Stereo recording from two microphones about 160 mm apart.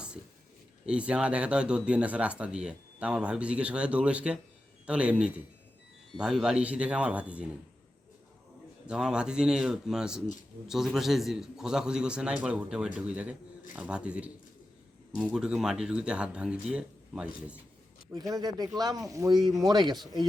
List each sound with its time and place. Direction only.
0.9 s speech: 5° right (ahead or behind)
8.9 s a man's voice: 5° right (ahead or behind)
18.1 s speech: 25° right (ahead or behind)